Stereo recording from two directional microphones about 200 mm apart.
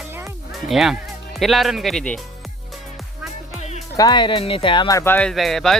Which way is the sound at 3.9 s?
20° left (ahead or behind).